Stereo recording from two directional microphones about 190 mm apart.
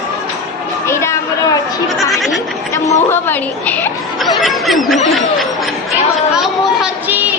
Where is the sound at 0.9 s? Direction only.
15° left (ahead or behind).